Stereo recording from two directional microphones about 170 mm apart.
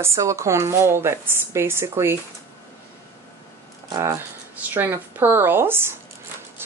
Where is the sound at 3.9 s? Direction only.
15° right (ahead or behind).